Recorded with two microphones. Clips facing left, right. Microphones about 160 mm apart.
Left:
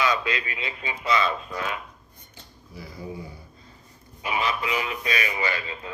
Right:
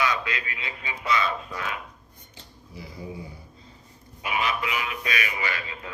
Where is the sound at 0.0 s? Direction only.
25° left (ahead or behind).